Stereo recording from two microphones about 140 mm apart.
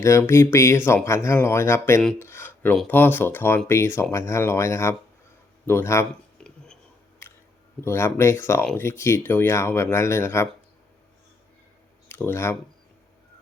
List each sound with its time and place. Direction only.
0.0 s speech: 20° left (ahead or behind)
2.2 s a sound: 20° left (ahead or behind)
2.8 s speech: 15° left (ahead or behind)
6.4 s whispering: 5° left (ahead or behind)
7.2 s a sound: 15° left (ahead or behind)
7.9 s speech: 20° left (ahead or behind)
12.0 s speech: 15° left (ahead or behind)